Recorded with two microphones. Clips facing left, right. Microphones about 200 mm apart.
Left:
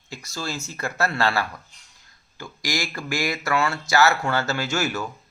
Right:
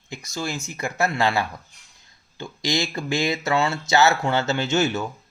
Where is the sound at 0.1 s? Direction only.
15° right (ahead or behind).